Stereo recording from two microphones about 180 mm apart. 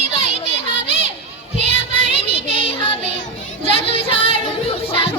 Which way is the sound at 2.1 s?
30° left (ahead or behind).